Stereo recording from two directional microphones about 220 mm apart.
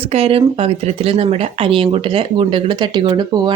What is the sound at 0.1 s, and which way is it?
Speech, 25° right (ahead or behind).